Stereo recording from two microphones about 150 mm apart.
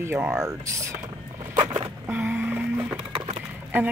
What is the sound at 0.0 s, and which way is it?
Speech, 15° right (ahead or behind).